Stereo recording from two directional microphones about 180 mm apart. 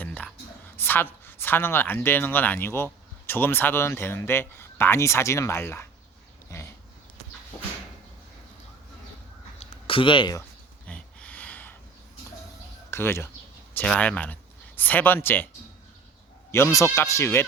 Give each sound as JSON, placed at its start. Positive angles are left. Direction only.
{"t": 0.0, "sound": "whispering", "side_deg": 5}
{"t": 0.8, "sound": "speech", "side_deg": 10}
{"t": 6.5, "sound": "dog", "side_deg": 15}
{"t": 9.6, "sound": "a sound", "side_deg": 30}
{"t": 10.8, "sound": "a sound", "side_deg": 5}
{"t": 12.9, "sound": "speech", "side_deg": 15}
{"t": 16.5, "sound": "speech", "side_deg": 15}